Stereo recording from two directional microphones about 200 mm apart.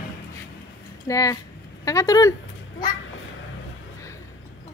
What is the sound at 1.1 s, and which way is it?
A woman's voice, 15° left (ahead or behind).